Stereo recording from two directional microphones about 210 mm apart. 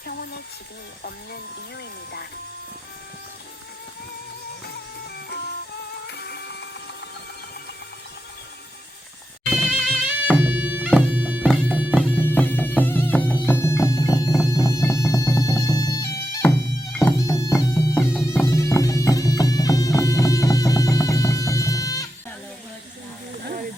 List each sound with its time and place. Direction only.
0.0 s a sound: 45° left (ahead or behind)
4.6 s music: 50° left (ahead or behind)
9.5 s music: centre (ahead or behind)
10.2 s bagpipes: 5° right (ahead or behind)
12.2 s music: 10° left (ahead or behind)
13.4 s bagpipes: 10° left (ahead or behind)